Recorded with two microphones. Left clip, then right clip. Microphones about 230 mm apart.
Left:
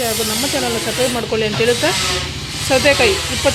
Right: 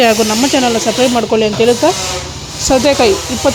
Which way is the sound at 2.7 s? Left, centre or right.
Right.